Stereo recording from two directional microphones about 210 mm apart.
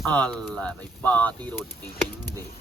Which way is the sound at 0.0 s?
5° left (ahead or behind).